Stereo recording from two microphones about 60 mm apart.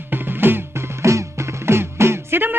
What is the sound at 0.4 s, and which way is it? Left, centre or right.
Music, right.